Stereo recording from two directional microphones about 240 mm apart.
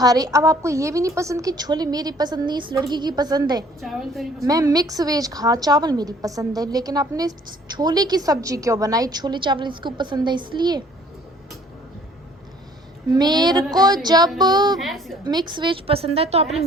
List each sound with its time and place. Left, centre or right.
0.0 s a woman's voice: centre
3.8 s a woman's voice: centre
4.4 s a woman's voice: centre
13.1 s a woman's voice: centre
14.8 s a woman's voice: centre
15.2 s a woman's voice: centre